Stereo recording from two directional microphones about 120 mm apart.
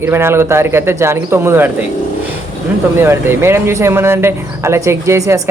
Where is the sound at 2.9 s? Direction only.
20° right (ahead or behind).